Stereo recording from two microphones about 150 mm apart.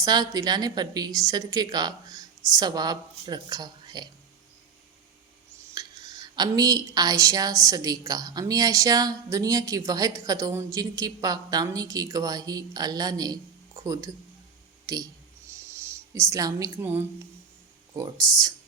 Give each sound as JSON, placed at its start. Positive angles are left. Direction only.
{"t": 0.0, "sound": "a woman's voice", "side_deg": -25}
{"t": 5.7, "sound": "a woman's voice", "side_deg": -25}
{"t": 17.9, "sound": "a woman's voice", "side_deg": -25}